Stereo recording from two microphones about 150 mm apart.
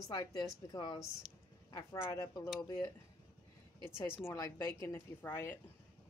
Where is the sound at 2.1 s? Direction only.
20° left (ahead or behind).